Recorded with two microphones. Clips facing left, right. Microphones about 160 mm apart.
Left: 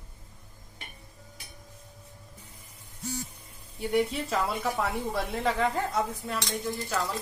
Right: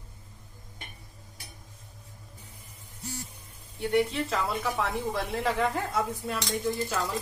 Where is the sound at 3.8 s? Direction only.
5° left (ahead or behind).